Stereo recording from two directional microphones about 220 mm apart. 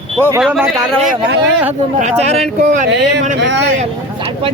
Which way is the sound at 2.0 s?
30° right (ahead or behind).